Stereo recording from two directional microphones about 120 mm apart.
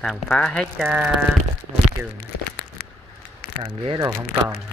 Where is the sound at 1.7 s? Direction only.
65° right (ahead or behind).